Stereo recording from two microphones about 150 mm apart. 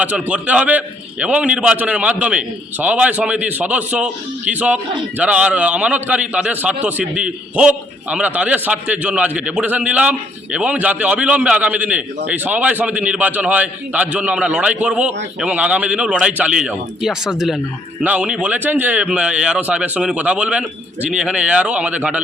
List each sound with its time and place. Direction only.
0.0 s a man's voice: 10° right (ahead or behind)